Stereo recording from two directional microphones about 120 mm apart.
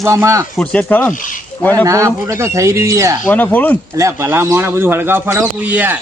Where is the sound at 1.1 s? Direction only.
90° left.